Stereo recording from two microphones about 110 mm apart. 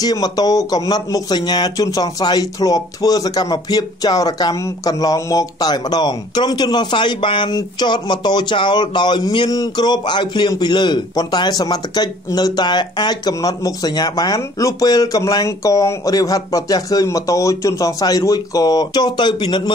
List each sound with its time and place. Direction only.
0.0 s speech: 35° left (ahead or behind)